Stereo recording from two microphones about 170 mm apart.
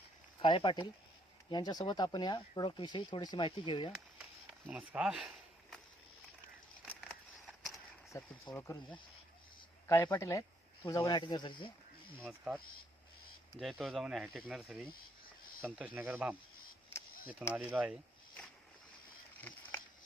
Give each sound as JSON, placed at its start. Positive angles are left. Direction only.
{"t": 0.4, "sound": "speech", "side_deg": 30}
{"t": 4.6, "sound": "speech", "side_deg": -10}
{"t": 7.1, "sound": "a sound", "side_deg": 0}
{"t": 8.1, "sound": "speech", "side_deg": 20}
{"t": 12.2, "sound": "speech", "side_deg": -5}
{"t": 13.6, "sound": "speech", "side_deg": 0}
{"t": 17.5, "sound": "speech", "side_deg": -5}
{"t": 19.4, "sound": "a sound", "side_deg": 10}